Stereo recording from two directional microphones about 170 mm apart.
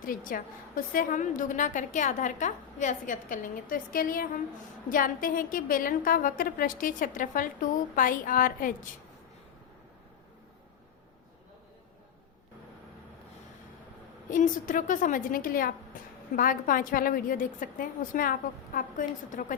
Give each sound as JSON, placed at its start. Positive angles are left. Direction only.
{"t": 0.0, "sound": "a woman's voice", "side_deg": 55}
{"t": 14.3, "sound": "a woman's voice", "side_deg": 50}
{"t": 15.9, "sound": "a sound", "side_deg": 50}
{"t": 16.3, "sound": "a woman's voice", "side_deg": 55}